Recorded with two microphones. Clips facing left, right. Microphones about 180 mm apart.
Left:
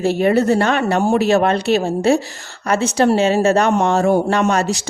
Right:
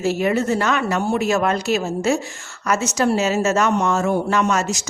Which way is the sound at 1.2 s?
30° left (ahead or behind).